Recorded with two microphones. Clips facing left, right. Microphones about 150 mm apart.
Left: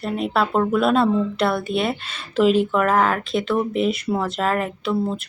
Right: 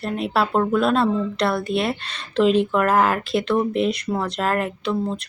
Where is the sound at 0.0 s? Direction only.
Centre (ahead or behind).